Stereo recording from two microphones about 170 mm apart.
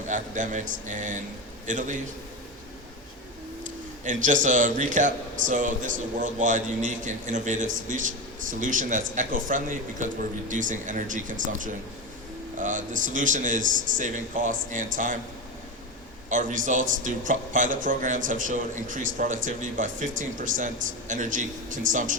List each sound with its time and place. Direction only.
0.1 s speech: 50° right (ahead or behind)
4.0 s speech: 50° right (ahead or behind)
16.3 s speech: 50° right (ahead or behind)